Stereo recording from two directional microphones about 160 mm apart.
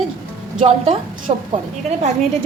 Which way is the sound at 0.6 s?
35° right (ahead or behind).